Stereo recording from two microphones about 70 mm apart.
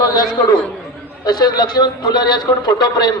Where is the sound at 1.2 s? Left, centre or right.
Left.